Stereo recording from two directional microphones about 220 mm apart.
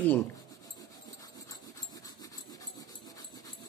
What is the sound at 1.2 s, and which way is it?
Dog, 15° left (ahead or behind).